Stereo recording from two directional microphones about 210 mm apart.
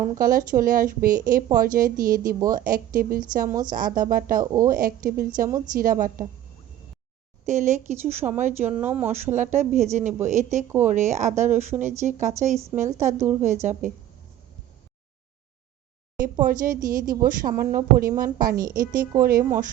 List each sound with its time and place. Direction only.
0.2 s a woman's voice: 40° right (ahead or behind)
7.4 s a woman's voice: 35° right (ahead or behind)
13.1 s a woman's voice: 10° right (ahead or behind)
13.4 s a woman's voice: 35° right (ahead or behind)
16.2 s a woman's voice: 40° right (ahead or behind)